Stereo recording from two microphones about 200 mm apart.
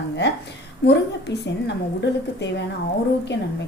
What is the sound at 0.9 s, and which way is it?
A woman's voice, 60° left (ahead or behind).